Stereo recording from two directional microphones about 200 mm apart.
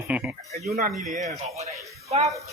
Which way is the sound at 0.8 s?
40° right (ahead or behind).